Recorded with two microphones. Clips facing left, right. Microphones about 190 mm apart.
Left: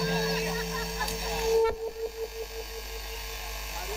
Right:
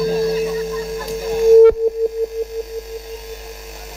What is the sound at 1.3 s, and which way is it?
Music, 45° right (ahead or behind).